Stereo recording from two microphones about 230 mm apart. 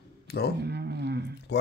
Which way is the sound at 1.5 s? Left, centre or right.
Left.